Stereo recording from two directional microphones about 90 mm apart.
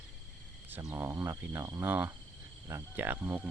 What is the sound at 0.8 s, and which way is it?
Speech, 35° right (ahead or behind).